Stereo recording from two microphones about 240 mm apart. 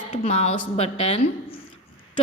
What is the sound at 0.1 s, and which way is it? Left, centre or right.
A woman's voice, left.